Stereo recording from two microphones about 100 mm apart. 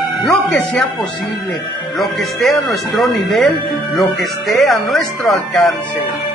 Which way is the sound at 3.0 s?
Centre (ahead or behind).